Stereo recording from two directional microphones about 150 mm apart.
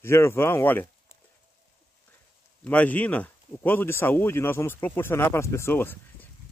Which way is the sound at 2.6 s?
10° left (ahead or behind).